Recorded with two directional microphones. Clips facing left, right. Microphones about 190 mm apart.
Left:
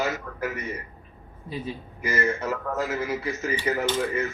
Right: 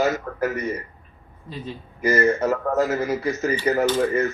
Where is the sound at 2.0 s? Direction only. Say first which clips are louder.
Right 8 dB; 40° right (ahead or behind).